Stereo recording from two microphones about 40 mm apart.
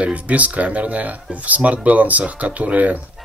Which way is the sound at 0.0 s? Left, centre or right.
Right.